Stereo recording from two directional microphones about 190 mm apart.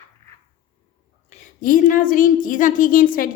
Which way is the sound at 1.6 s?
45° left (ahead or behind).